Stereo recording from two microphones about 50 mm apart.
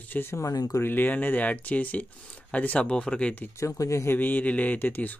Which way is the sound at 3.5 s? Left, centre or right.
Left.